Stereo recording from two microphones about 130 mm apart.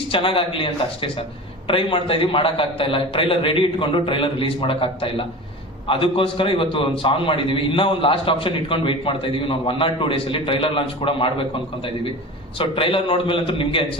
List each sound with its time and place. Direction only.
0.1 s a man's voice: 45° left (ahead or behind)
12.5 s a man's voice: 45° left (ahead or behind)